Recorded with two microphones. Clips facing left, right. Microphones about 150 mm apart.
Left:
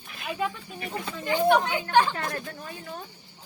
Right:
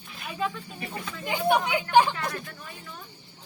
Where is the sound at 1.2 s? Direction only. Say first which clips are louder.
Left 3 dB; 15° right (ahead or behind).